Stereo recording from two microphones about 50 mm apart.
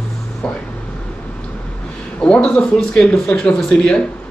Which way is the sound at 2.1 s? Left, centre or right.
Left.